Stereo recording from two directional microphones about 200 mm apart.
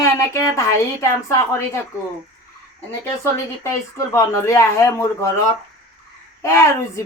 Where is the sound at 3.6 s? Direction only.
15° left (ahead or behind).